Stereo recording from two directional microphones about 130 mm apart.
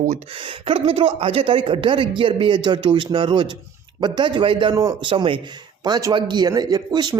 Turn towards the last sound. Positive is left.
turn(degrees=-30)  # may be behind; listen again after turning